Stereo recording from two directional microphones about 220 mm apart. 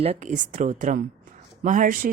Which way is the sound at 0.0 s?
30° right (ahead or behind).